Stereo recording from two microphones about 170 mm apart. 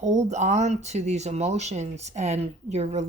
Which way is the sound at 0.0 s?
45° right (ahead or behind).